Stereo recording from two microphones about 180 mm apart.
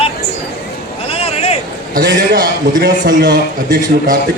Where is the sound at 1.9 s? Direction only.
60° right (ahead or behind).